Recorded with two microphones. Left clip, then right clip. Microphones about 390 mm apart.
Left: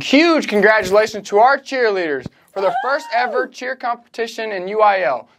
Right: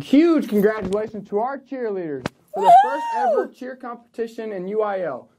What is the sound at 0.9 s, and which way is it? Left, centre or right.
Speech, centre.